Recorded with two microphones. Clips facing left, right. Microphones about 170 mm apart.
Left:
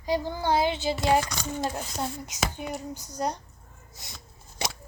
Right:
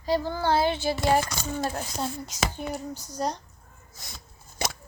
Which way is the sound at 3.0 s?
10° left (ahead or behind).